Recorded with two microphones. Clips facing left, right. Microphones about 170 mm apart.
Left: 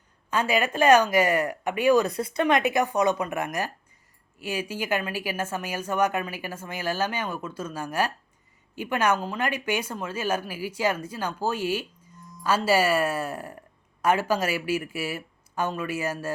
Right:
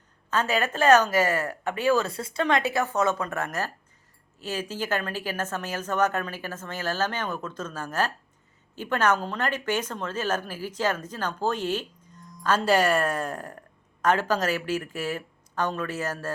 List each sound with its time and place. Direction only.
0.3 s speech: 10° left (ahead or behind)